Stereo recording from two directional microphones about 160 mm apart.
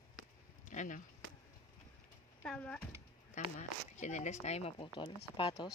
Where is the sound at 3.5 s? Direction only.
45° left (ahead or behind).